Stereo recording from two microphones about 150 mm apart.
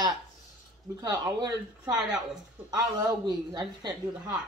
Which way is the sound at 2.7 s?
25° right (ahead or behind).